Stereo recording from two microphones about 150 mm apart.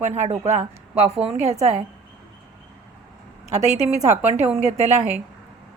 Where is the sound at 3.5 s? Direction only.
50° right (ahead or behind).